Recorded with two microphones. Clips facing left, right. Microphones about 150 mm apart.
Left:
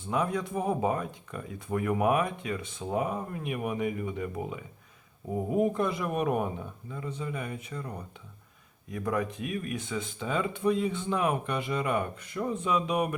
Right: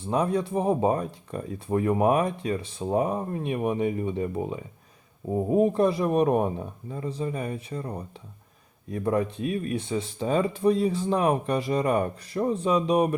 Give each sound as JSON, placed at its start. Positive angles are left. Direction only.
{"t": 0.0, "sound": "speech", "side_deg": -35}